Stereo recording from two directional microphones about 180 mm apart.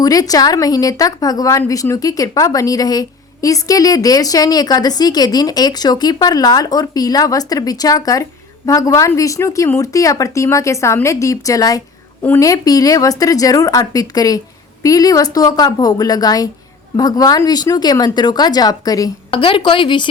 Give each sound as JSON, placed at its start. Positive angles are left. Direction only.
{"t": 0.0, "sound": "speech", "side_deg": 20}